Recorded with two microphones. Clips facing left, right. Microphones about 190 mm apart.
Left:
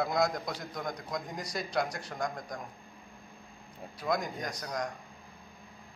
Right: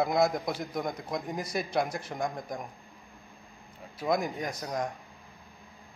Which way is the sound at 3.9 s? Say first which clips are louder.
Right 4 dB; 25° right (ahead or behind).